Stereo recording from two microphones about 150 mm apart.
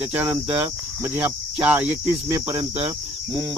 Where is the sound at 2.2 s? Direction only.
25° right (ahead or behind).